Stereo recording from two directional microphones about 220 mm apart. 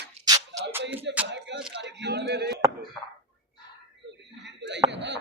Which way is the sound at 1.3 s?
55° right (ahead or behind).